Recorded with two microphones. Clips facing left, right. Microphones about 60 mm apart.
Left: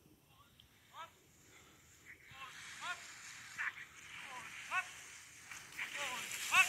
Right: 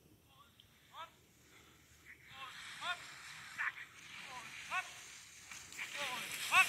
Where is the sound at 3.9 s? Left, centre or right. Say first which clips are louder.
Left 1 dB; left.